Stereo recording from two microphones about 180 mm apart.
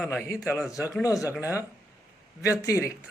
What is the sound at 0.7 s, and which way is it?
Speech, 20° left (ahead or behind).